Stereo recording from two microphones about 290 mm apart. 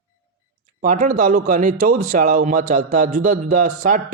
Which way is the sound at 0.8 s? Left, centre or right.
Right.